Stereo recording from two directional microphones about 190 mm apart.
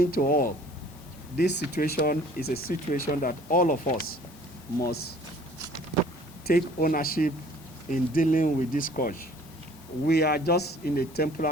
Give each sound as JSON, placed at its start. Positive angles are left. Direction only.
{"t": 0.0, "sound": "speech", "side_deg": 50}
{"t": 1.4, "sound": "speech", "side_deg": 60}
{"t": 6.5, "sound": "speech", "side_deg": 45}